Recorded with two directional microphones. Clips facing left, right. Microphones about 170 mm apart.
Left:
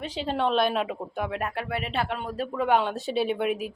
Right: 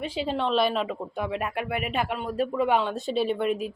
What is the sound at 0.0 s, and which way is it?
Speech, 10° right (ahead or behind).